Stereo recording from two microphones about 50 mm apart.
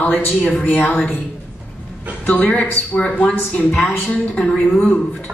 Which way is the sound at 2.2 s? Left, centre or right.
Left.